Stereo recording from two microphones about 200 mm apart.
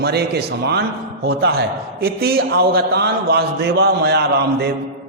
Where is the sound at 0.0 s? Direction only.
55° right (ahead or behind).